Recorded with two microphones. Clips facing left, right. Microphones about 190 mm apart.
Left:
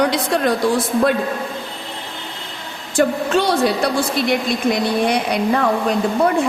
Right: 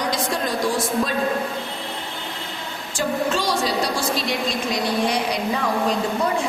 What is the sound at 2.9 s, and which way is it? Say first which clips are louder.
A man's voice: left 6 dB; 60° left (ahead or behind).